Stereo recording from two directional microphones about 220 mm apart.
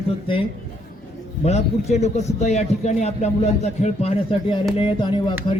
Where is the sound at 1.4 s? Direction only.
30° left (ahead or behind).